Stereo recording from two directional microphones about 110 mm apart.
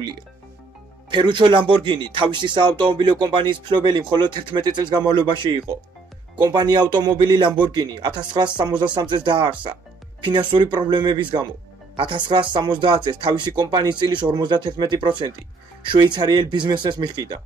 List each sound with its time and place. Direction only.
1.1 s speech: 45° right (ahead or behind)